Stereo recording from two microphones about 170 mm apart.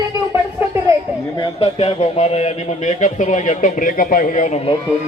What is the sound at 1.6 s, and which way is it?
A man's voice, 35° left (ahead or behind).